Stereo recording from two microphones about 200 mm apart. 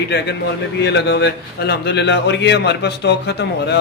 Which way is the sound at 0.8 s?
60° left (ahead or behind).